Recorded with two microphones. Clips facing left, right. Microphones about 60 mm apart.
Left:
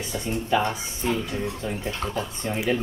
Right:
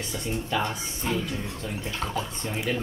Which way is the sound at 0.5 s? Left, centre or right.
Left.